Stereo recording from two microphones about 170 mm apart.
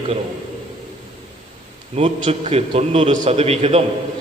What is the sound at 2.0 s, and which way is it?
A man's voice, 40° right (ahead or behind).